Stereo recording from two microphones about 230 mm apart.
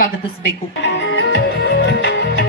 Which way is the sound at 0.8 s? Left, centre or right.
Left.